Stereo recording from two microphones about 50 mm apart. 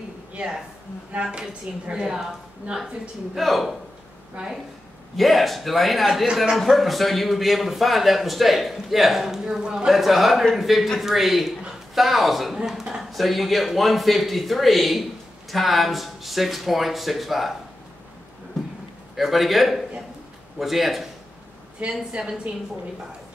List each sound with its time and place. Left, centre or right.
0.4 s a woman's voice: right
3.3 s a man's voice: centre
5.1 s a man's voice: centre
9.9 s a man's voice: centre
19.1 s a man's voice: centre
21.8 s speech: right